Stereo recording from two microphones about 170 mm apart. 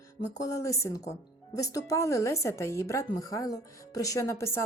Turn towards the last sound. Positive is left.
turn(degrees=15)  # may be behind; listen again after turning